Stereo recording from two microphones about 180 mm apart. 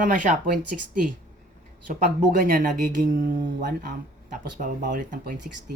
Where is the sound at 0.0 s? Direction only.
45° right (ahead or behind).